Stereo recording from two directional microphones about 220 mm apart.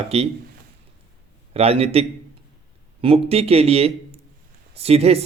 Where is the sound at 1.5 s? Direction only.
25° right (ahead or behind).